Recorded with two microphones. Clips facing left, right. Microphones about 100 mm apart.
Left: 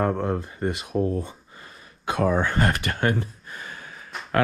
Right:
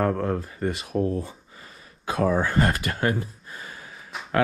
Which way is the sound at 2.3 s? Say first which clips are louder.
Even; 35° right (ahead or behind).